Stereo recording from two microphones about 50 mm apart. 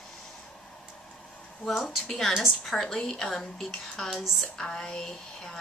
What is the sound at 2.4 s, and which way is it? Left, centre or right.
Speech, centre.